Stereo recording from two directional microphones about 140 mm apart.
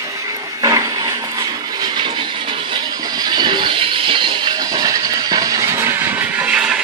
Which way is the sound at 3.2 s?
30° right (ahead or behind).